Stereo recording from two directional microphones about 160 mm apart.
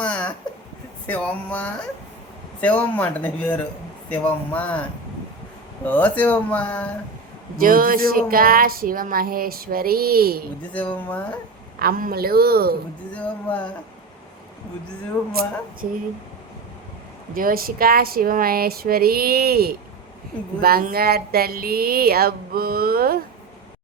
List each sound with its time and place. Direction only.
0.0 s a sound: 10° left (ahead or behind)
1.0 s speech: 10° left (ahead or behind)
7.6 s a sound: 60° right (ahead or behind)
10.6 s speech: 10° left (ahead or behind)
11.8 s speech: 65° right (ahead or behind)
13.1 s speech: 10° left (ahead or behind)
17.3 s speech: 65° right (ahead or behind)